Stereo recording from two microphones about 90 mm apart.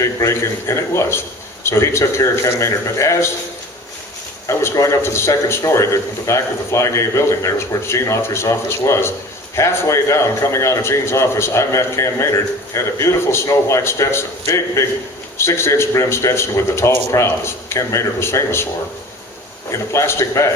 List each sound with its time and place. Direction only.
0.0 s a man's voice: 35° left (ahead or behind)
4.4 s a man's voice: 35° left (ahead or behind)
19.9 s a man's voice: 30° left (ahead or behind)